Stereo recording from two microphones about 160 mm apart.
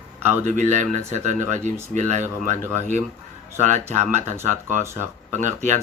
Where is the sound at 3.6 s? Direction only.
50° right (ahead or behind).